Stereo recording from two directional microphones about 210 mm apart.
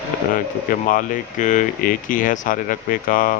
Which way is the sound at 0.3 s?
40° left (ahead or behind).